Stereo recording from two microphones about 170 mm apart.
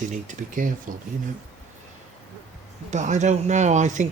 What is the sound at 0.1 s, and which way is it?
Speech, 50° right (ahead or behind).